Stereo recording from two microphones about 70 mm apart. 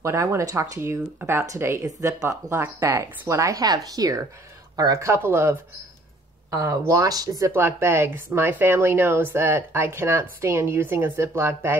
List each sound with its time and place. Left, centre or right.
0.0 s speech: right
2.2 s speech: right
2.8 s speech: right
3.6 s speech: right
5.0 s speech: right
6.5 s speech: right
7.5 s speech: right